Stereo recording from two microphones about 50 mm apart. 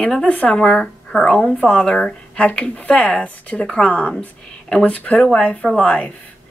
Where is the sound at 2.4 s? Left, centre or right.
Left.